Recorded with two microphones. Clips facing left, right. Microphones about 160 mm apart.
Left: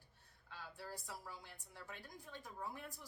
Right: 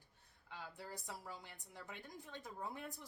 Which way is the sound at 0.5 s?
20° right (ahead or behind).